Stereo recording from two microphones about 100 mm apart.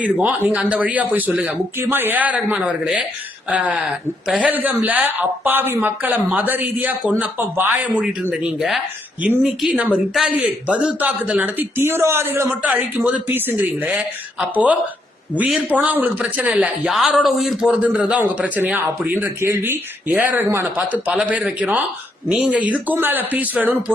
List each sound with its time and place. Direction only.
0.0 s speech: 15° right (ahead or behind)
8.3 s speech: 10° right (ahead or behind)
17.7 s speech: 15° right (ahead or behind)
21.1 s speech: 10° right (ahead or behind)